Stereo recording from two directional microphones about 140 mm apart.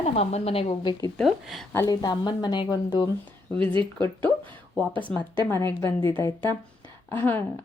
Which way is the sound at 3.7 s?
35° right (ahead or behind).